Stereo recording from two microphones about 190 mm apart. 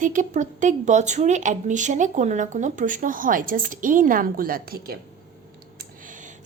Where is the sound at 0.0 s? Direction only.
45° right (ahead or behind).